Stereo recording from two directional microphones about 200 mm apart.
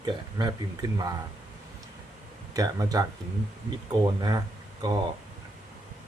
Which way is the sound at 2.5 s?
15° right (ahead or behind).